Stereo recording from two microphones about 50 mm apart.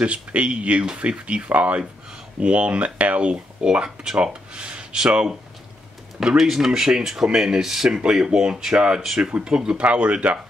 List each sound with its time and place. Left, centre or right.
0.0 s speech: right